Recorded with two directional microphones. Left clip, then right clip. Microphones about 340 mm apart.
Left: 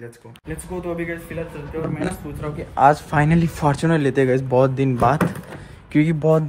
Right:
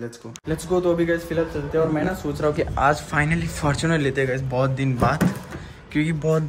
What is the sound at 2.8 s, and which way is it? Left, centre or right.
Speech, centre.